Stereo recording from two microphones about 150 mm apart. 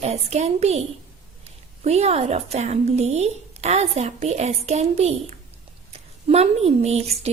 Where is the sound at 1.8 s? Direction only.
45° right (ahead or behind).